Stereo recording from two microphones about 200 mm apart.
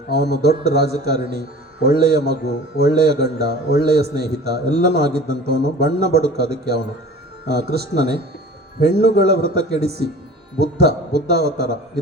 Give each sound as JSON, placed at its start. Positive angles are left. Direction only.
{"t": 0.1, "sound": "speech", "side_deg": -55}
{"t": 9.0, "sound": "a man's voice", "side_deg": 55}
{"t": 9.2, "sound": "speech", "side_deg": -55}